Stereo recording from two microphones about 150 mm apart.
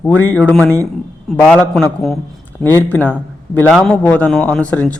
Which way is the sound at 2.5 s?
15° left (ahead or behind).